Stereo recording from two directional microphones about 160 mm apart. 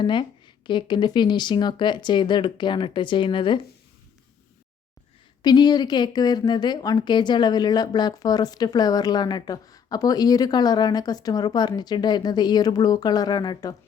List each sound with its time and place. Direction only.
0.0 s a woman's voice: 30° left (ahead or behind)
5.4 s a woman's voice: 25° left (ahead or behind)